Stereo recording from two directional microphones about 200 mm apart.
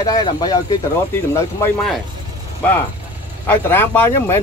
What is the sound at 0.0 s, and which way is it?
Speech, 20° left (ahead or behind).